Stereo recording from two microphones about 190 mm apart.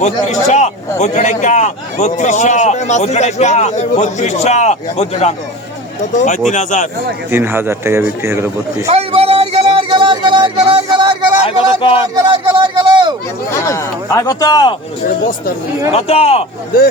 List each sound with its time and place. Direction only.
0.0 s a man's voice: 40° left (ahead or behind)
7.3 s speech: 10° right (ahead or behind)
8.9 s a sound: 35° right (ahead or behind)
11.4 s speech: 30° left (ahead or behind)
12.1 s speech: 20° right (ahead or behind)
13.5 s speech: 15° left (ahead or behind)
15.9 s a man's voice: 30° left (ahead or behind)